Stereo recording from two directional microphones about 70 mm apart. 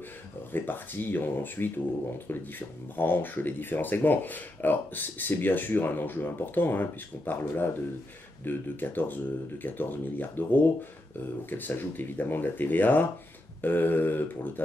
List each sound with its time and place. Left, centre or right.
0.5 s speech: left
3.0 s speech: left